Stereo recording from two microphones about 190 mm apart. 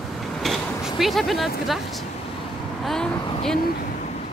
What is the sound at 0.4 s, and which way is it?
Speech, centre (ahead or behind).